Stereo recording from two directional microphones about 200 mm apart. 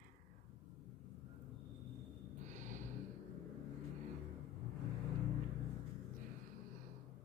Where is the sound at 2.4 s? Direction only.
40° right (ahead or behind).